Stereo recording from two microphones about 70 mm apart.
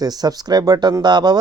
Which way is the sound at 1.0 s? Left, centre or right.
Right.